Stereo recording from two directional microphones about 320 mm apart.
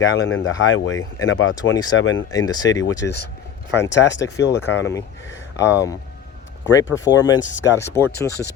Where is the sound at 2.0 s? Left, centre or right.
Left.